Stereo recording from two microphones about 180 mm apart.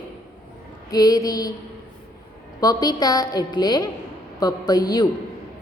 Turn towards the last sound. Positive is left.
turn(degrees=20)  # may be behind; listen again after turning